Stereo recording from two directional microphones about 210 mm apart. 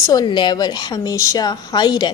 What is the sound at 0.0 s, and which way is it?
A woman's voice, 20° left (ahead or behind).